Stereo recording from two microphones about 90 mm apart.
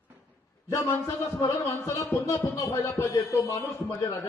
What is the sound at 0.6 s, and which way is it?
A man's voice, 35° left (ahead or behind).